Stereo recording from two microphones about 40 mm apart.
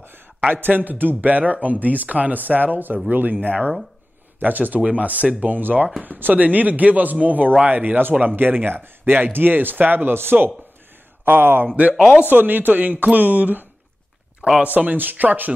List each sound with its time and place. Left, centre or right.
0.5 s speech: right
4.7 s speech: right
11.6 s speech: right
12.3 s speech: right
12.9 s speech: right
13.2 s speech: right